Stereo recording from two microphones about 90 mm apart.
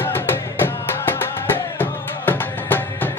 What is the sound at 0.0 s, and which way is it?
Music, 25° left (ahead or behind).